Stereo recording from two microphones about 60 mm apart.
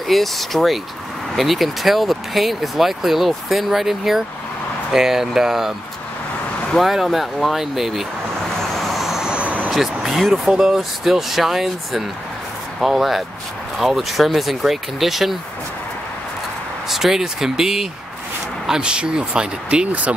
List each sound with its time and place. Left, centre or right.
0.1 s speech: centre
6.8 s speech: centre
8.7 s vehicle: centre
9.3 s vehicle: right
9.7 s speech: centre
16.9 s speech: centre